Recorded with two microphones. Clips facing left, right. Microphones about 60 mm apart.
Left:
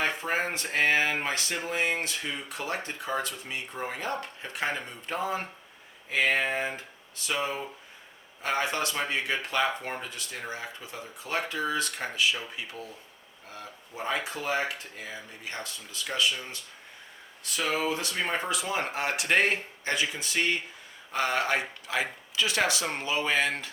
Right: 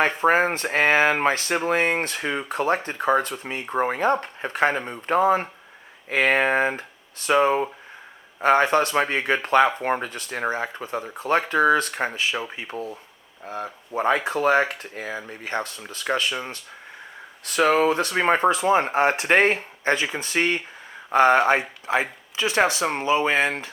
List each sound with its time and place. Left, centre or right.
0.2 s speech: right
13.9 s speech: right
17.4 s speech: right